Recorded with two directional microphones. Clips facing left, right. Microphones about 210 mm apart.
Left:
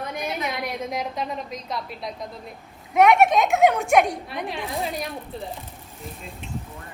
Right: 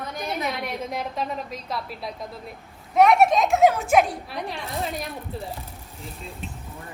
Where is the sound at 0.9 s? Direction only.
Centre (ahead or behind).